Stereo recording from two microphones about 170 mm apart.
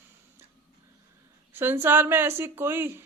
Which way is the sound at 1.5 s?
15° right (ahead or behind).